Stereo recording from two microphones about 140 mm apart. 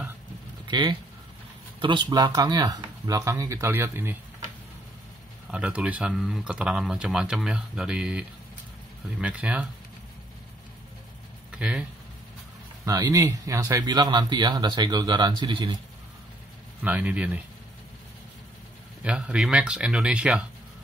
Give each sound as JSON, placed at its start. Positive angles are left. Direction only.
{"t": 0.7, "sound": "speech", "side_deg": -35}
{"t": 5.5, "sound": "speech", "side_deg": -10}
{"t": 11.5, "sound": "a sound", "side_deg": -5}
{"t": 12.8, "sound": "speech", "side_deg": -25}
{"t": 16.8, "sound": "speech", "side_deg": -10}
{"t": 19.0, "sound": "speech", "side_deg": -5}